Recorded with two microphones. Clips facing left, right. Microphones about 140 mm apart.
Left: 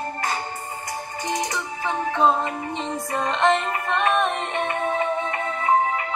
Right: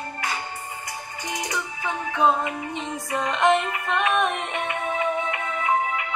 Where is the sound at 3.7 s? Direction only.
40° left (ahead or behind).